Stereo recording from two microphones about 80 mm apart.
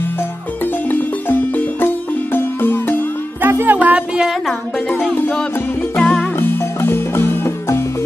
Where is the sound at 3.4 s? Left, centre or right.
Right.